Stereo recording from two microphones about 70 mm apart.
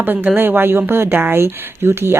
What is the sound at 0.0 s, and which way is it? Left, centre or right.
Speech, right.